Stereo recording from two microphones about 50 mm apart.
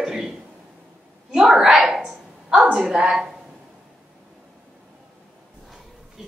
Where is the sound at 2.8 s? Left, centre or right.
Centre.